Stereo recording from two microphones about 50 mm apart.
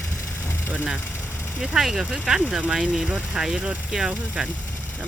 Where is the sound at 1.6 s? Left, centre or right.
Centre.